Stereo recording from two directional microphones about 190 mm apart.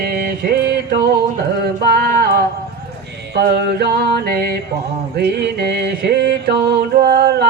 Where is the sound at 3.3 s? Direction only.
60° right (ahead or behind).